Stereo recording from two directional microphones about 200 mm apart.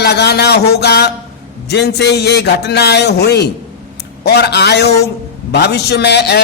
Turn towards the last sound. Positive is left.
turn(degrees=55)  # may be behind; listen again after turning